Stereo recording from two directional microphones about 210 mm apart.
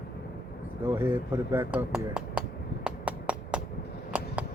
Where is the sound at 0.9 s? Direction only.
10° right (ahead or behind).